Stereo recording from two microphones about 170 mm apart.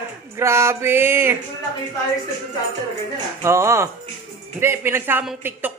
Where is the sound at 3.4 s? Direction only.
15° right (ahead or behind).